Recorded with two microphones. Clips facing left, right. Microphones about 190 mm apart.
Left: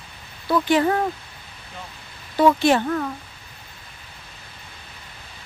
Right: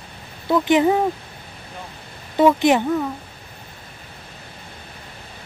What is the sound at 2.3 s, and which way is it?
Speech, 15° right (ahead or behind).